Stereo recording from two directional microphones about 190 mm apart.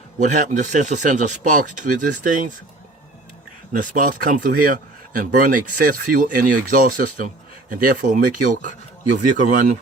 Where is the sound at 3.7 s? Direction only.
45° right (ahead or behind).